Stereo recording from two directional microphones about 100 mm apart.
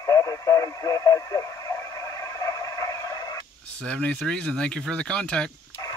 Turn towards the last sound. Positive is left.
turn(degrees=10)  # may be behind; listen again after turning